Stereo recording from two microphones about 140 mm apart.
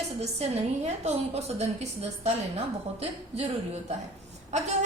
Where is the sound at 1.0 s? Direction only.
50° right (ahead or behind).